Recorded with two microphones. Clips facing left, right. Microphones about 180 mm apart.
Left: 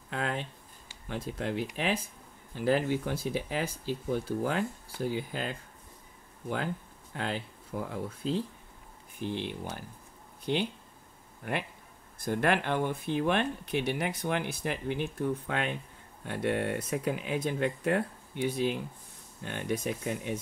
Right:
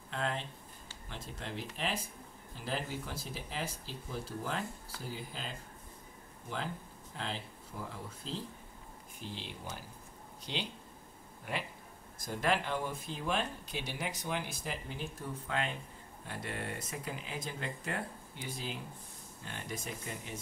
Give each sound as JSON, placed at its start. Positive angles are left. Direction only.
{"t": 0.1, "sound": "a sound", "side_deg": 65}
{"t": 1.0, "sound": "speech", "side_deg": 60}
{"t": 7.2, "sound": "speech", "side_deg": 65}
{"t": 9.2, "sound": "speech", "side_deg": 60}